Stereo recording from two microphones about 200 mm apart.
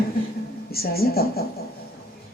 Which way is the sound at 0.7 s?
50° left (ahead or behind).